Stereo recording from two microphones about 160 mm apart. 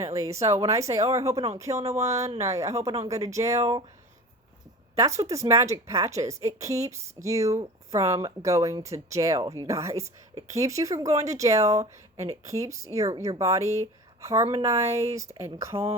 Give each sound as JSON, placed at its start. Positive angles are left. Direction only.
{"t": 0.0, "sound": "speech", "side_deg": -20}
{"t": 3.6, "sound": "speech", "side_deg": -35}
{"t": 4.9, "sound": "speech", "side_deg": -20}
{"t": 12.1, "sound": "speech", "side_deg": -45}
{"t": 12.5, "sound": "speech", "side_deg": -20}
{"t": 15.7, "sound": "speech", "side_deg": -35}